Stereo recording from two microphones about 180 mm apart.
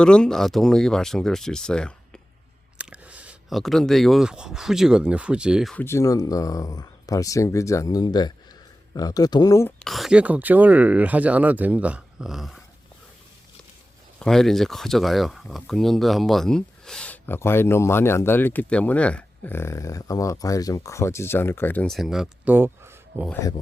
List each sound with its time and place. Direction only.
0.0 s speech: 5° left (ahead or behind)
2.7 s speech: 5° right (ahead or behind)
5.7 s speech: 15° left (ahead or behind)
9.8 s speech: centre (ahead or behind)
14.2 s speech: centre (ahead or behind)
23.3 s speech: 20° left (ahead or behind)